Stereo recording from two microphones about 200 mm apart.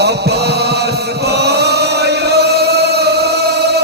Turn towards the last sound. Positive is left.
turn(degrees=-55)  # may be behind; listen again after turning